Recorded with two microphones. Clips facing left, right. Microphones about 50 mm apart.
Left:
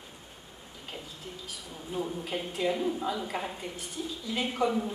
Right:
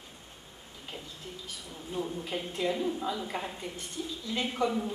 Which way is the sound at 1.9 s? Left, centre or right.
Centre.